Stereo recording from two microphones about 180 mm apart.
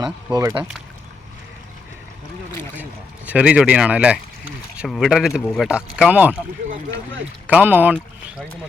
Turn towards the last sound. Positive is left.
turn(degrees=-10)  # may be behind; listen again after turning